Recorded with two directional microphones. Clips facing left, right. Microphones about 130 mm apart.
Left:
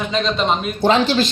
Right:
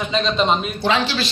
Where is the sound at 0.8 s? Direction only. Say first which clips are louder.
Left 8 dB; 45° left (ahead or behind).